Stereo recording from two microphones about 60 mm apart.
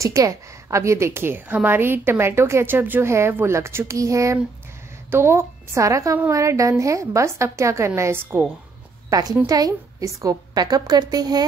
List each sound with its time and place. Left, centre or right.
0.0 s a woman's voice: right
3.1 s a woman's voice: right
5.1 s a woman's voice: right
5.9 s a woman's voice: right
9.1 s a woman's voice: right